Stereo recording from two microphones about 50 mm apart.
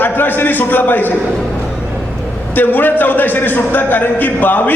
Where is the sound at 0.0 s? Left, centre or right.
Left.